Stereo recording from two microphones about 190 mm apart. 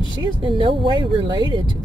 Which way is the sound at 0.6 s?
25° right (ahead or behind).